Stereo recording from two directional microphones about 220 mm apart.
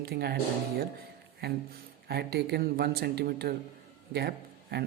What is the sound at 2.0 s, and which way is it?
Speech, 45° right (ahead or behind).